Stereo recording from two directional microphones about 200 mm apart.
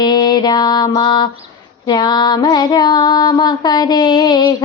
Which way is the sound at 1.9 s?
20° left (ahead or behind).